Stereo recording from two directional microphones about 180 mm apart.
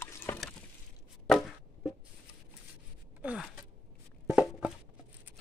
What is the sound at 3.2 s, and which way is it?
Gasp, centre (ahead or behind).